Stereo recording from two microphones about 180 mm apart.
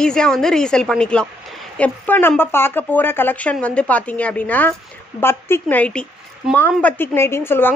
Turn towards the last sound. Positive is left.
turn(degrees=10)  # may be behind; listen again after turning